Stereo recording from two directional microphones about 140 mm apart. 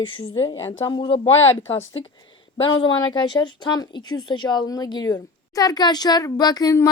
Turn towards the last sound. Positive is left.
turn(degrees=25)  # may be behind; listen again after turning